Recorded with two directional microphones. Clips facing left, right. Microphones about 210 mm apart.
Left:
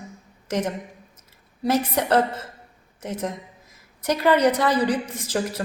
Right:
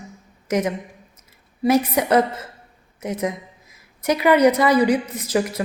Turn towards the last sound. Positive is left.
turn(degrees=-10)  # may be behind; listen again after turning